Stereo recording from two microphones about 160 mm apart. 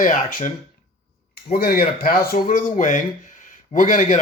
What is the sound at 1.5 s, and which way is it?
Speech, 70° left (ahead or behind).